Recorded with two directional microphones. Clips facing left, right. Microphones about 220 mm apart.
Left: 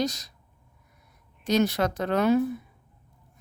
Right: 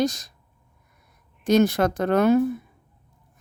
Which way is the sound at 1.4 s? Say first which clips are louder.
Right 5 dB; 50° right (ahead or behind).